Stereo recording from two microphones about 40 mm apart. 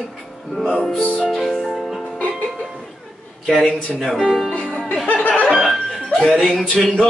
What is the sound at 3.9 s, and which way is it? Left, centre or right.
Music, centre.